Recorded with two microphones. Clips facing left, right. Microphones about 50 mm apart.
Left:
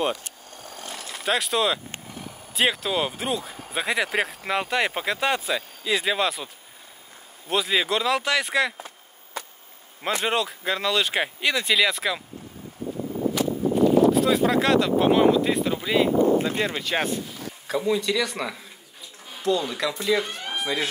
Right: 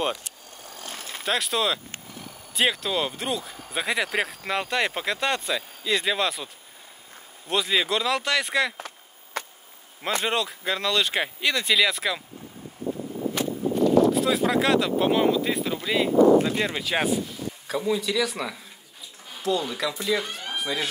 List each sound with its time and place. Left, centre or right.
1.2 s speech: centre
8.7 s chop: right
10.2 s speech: centre
14.0 s speech: centre